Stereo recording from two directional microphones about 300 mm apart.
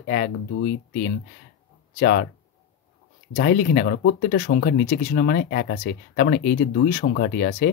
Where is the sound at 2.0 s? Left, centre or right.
Left.